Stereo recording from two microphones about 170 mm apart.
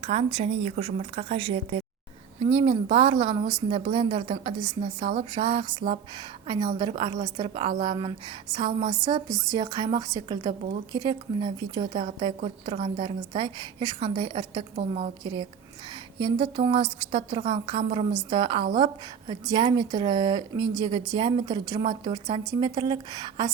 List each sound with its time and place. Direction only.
0.0 s a woman's voice: 35° right (ahead or behind)
15.2 s a woman's voice: 30° right (ahead or behind)